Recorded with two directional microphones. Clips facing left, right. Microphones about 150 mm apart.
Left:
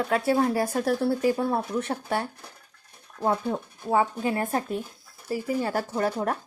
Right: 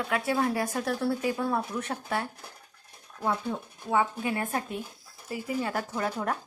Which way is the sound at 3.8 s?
35° left (ahead or behind).